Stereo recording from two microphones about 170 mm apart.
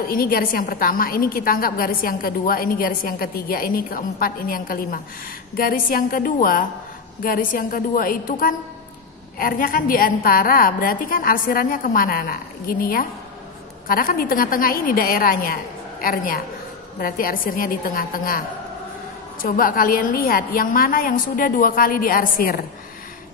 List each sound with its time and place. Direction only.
0.0 s a woman's voice: 60° left (ahead or behind)
19.4 s a woman's voice: 55° left (ahead or behind)